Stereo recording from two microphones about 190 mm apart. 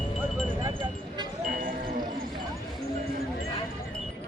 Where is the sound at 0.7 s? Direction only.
20° right (ahead or behind).